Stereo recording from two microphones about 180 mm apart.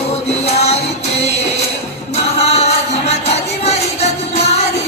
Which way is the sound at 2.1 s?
35° left (ahead or behind).